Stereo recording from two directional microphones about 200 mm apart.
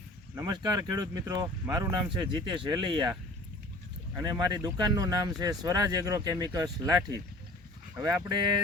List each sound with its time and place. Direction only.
0.3 s speech: 20° right (ahead or behind)
4.2 s speech: 20° right (ahead or behind)